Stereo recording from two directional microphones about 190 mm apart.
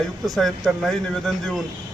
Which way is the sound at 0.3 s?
Centre (ahead or behind).